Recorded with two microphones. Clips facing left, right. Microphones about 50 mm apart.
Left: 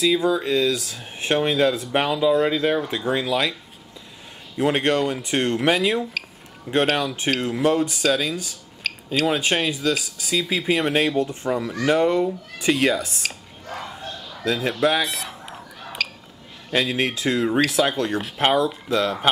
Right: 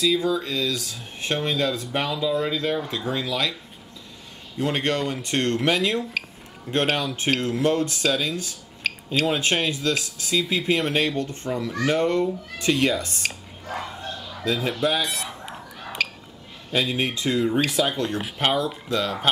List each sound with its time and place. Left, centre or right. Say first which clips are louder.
0.0 s speech: left 2 dB; centre
4.6 s speech: left 4 dB; centre
11.7 s a sound: left 2 dB; centre
16.7 s speech: left 2 dB; centre